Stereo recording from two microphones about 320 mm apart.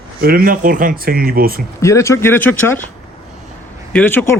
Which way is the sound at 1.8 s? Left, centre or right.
Centre.